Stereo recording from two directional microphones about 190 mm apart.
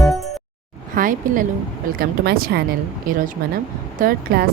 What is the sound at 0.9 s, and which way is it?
Speech, 45° right (ahead or behind).